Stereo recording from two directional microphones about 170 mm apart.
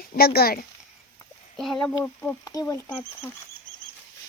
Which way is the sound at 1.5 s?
5° left (ahead or behind).